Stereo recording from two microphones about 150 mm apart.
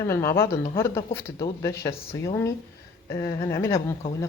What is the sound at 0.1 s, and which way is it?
Speech, 20° left (ahead or behind).